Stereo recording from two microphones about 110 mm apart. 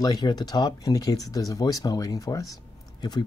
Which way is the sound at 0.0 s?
40° left (ahead or behind).